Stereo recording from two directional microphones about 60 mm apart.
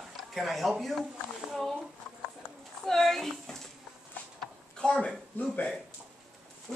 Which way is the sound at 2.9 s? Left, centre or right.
Centre.